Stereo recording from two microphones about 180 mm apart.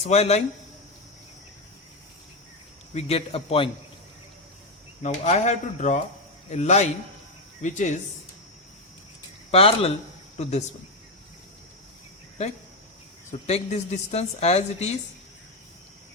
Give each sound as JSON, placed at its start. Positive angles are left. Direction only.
{"t": 0.0, "sound": "speech", "side_deg": 35}
{"t": 2.9, "sound": "speech", "side_deg": 35}
{"t": 5.0, "sound": "speech", "side_deg": 40}
{"t": 9.5, "sound": "speech", "side_deg": 35}
{"t": 13.3, "sound": "speech", "side_deg": 40}